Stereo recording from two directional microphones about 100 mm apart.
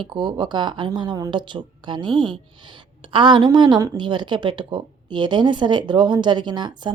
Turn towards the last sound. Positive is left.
turn(degrees=-50)  # may be behind; listen again after turning